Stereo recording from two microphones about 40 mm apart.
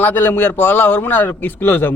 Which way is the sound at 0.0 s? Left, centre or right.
Left.